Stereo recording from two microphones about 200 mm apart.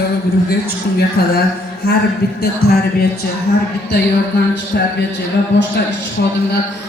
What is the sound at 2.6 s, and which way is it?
Speech, 50° left (ahead or behind).